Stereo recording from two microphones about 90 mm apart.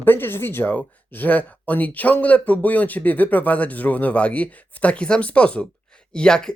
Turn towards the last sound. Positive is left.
turn(degrees=10)  # may be behind; listen again after turning